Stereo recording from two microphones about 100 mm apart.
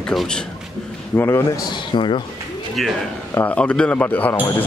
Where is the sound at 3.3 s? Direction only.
15° left (ahead or behind).